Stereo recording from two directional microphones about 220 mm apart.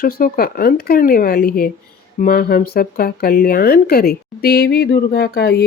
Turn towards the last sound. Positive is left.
turn(degrees=50)  # may be behind; listen again after turning